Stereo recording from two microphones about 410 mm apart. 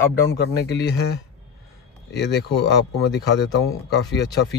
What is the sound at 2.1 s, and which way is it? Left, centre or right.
Speech, left.